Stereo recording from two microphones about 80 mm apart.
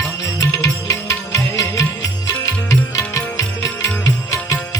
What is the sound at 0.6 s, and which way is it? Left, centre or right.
Music, left.